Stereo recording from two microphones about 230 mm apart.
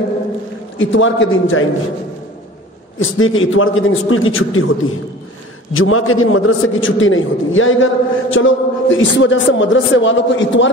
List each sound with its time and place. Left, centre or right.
0.7 s a man's voice: left
3.0 s a man's voice: left
5.7 s a man's voice: left